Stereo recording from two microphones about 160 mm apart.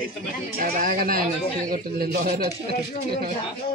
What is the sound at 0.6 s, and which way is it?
Speech, 60° right (ahead or behind).